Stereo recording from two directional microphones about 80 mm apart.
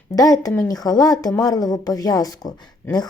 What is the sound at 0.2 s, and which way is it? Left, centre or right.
Speech, left.